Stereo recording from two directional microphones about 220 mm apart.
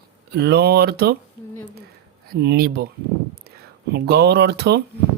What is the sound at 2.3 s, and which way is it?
Speech, 45° right (ahead or behind).